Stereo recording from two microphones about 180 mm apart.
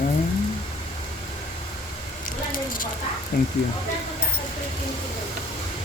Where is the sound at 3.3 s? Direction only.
45° left (ahead or behind).